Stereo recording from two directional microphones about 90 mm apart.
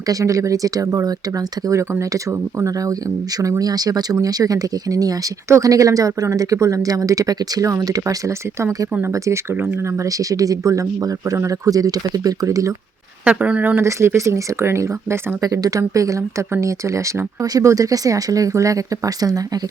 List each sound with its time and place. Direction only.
0.1 s speech: 40° right (ahead or behind)
9.1 s speech: 35° right (ahead or behind)
13.2 s speech: 15° right (ahead or behind)
13.8 s speech: 30° right (ahead or behind)
15.4 s speech: 45° right (ahead or behind)